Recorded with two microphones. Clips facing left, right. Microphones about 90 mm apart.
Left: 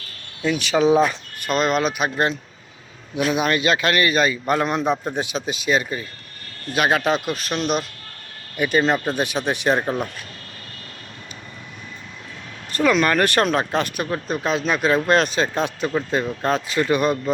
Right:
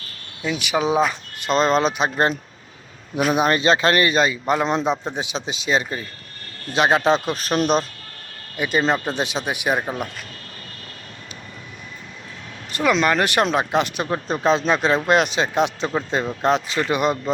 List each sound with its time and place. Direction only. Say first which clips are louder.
0.5 s speech: left 3 dB; 15° right (ahead or behind); by 7.6 s 35° right (ahead or behind)
8.5 s speech: left 1 dB; 20° right (ahead or behind)
12.7 s speech: left 1 dB; 20° right (ahead or behind)